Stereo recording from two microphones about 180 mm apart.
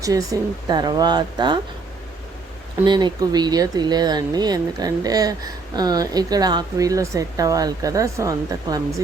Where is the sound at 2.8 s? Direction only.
25° right (ahead or behind).